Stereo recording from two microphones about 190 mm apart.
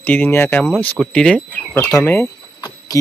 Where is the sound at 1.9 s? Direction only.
15° left (ahead or behind).